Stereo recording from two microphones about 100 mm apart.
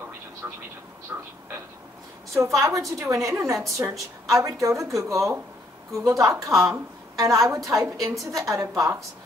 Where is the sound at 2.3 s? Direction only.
30° right (ahead or behind).